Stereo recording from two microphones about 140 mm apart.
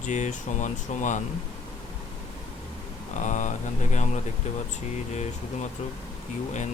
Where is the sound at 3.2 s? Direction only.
60° left (ahead or behind).